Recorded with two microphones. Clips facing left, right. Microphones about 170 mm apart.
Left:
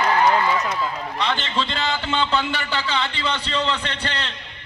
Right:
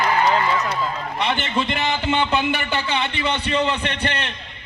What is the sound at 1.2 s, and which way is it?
A man's voice, 20° right (ahead or behind).